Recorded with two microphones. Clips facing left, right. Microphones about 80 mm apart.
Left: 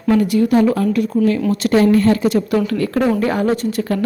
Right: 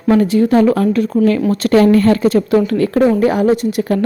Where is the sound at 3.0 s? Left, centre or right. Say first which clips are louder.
Right 5 dB; centre.